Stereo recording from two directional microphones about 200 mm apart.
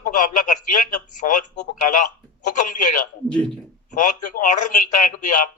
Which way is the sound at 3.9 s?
40° left (ahead or behind).